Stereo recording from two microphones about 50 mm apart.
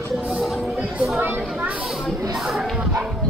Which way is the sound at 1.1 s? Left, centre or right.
Right.